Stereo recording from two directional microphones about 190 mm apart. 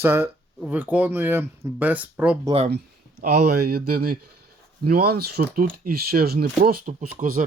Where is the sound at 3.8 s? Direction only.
50° right (ahead or behind).